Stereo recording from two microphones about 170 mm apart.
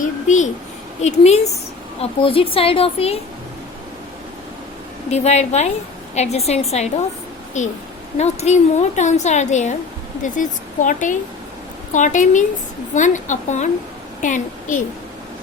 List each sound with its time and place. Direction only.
0.0 s a sound: 45° left (ahead or behind)
1.0 s a woman's voice: 40° left (ahead or behind)
5.1 s a woman's voice: 40° left (ahead or behind)